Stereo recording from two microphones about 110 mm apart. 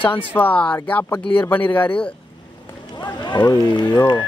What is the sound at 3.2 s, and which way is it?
Speech, 40° left (ahead or behind).